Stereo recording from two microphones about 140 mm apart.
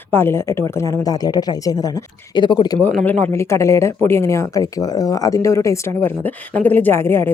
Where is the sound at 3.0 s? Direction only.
10° left (ahead or behind).